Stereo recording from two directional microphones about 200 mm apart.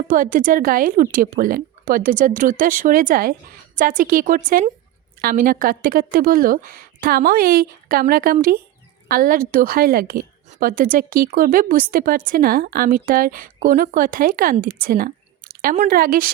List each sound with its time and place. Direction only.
0.1 s a woman's voice: 40° right (ahead or behind)